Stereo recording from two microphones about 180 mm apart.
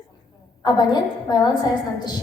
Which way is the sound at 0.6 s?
25° left (ahead or behind).